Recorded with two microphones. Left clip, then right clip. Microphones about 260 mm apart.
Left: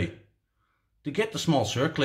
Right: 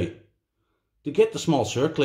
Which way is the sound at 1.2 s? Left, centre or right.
Left.